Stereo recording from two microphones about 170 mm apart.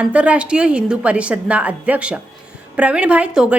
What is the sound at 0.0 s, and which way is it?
A woman's voice, 10° right (ahead or behind).